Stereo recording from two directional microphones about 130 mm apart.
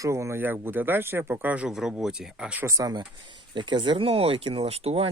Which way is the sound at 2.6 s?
25° right (ahead or behind).